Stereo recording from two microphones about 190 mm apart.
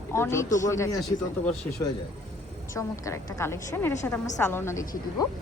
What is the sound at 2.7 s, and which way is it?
A woman's voice, 15° left (ahead or behind).